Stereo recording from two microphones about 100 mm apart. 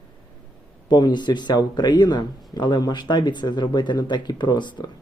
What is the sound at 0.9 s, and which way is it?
Speech, 45° left (ahead or behind).